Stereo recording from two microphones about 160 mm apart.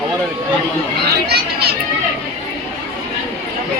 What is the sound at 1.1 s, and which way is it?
Speech, 80° right.